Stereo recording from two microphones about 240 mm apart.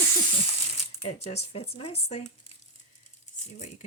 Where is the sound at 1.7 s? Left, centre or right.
Left.